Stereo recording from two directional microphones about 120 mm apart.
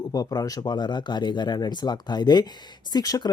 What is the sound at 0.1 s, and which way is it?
Speech, 30° left (ahead or behind).